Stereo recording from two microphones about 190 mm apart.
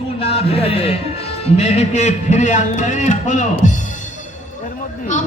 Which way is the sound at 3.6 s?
40° left (ahead or behind).